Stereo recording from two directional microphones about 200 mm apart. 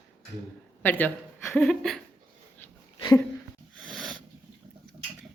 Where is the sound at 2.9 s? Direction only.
20° left (ahead or behind).